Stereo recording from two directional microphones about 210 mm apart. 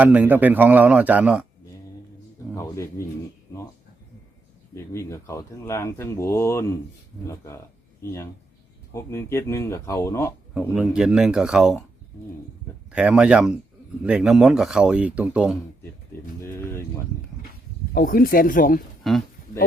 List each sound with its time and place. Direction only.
0.0 s a man's voice: 5° right (ahead or behind)
2.6 s speech: 15° left (ahead or behind)
4.7 s speech: 15° left (ahead or behind)
10.5 s speech: 5° right (ahead or behind)
12.9 s speech: 5° right (ahead or behind)
16.4 s speech: 10° left (ahead or behind)
17.9 s speech: 40° left (ahead or behind)
19.1 s speech: centre (ahead or behind)